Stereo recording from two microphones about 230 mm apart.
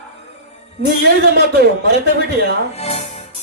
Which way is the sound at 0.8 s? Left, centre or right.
Right.